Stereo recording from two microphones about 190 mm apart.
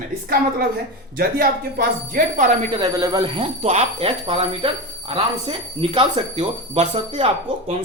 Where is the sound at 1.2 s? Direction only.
50° right (ahead or behind).